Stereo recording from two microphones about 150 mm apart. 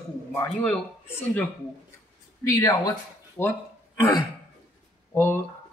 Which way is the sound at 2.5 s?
25° left (ahead or behind).